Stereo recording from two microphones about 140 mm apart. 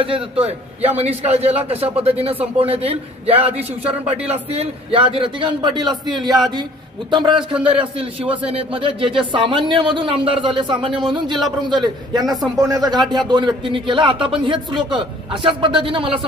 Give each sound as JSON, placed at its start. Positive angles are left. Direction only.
{"t": 0.0, "sound": "a man's voice", "side_deg": -40}